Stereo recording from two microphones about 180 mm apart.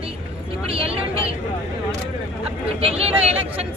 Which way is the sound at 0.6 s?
30° right (ahead or behind).